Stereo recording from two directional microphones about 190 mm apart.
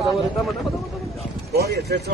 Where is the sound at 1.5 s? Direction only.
55° right (ahead or behind).